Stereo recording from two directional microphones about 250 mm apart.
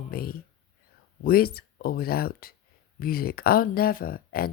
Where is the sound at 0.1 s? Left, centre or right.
Left.